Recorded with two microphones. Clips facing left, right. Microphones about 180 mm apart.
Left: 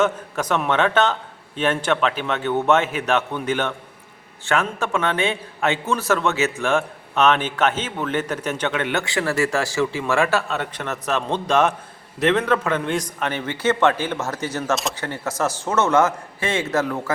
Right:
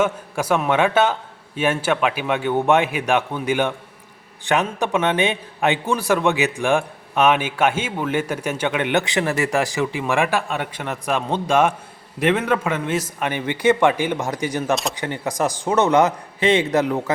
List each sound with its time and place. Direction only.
0.0 s a man's voice: 10° right (ahead or behind)